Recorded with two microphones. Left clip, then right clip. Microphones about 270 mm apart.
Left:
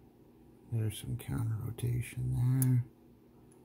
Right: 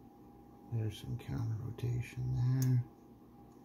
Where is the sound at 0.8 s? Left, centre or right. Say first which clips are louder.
Left 3 dB; centre.